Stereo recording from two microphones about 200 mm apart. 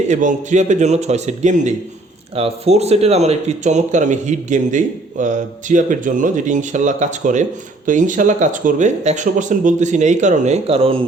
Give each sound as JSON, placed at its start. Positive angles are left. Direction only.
{"t": 0.1, "sound": "speech", "side_deg": -40}